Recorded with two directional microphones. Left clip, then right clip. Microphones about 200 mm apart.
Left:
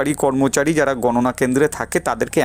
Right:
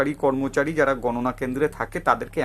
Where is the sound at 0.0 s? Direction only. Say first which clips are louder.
Left 5 dB; 45° left (ahead or behind).